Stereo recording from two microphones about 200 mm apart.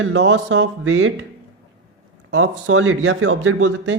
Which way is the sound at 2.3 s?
75° right (ahead or behind).